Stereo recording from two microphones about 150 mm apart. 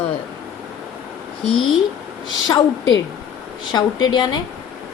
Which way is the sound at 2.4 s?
30° left (ahead or behind).